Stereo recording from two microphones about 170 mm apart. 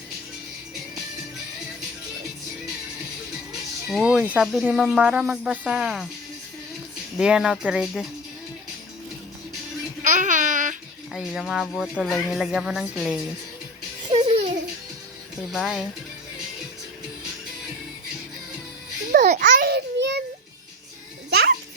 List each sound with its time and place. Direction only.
3.8 s speech: centre (ahead or behind)
7.2 s speech: 5° right (ahead or behind)
10.0 s babbling: 50° right (ahead or behind)
11.1 s speech: 5° right (ahead or behind)
14.1 s baby laughter: 30° right (ahead or behind)
15.5 s speech: centre (ahead or behind)
19.1 s a sound: 50° right (ahead or behind)
19.5 s a sound: 65° right (ahead or behind); by 20.2 s 85° right
21.2 s music: 70° right (ahead or behind)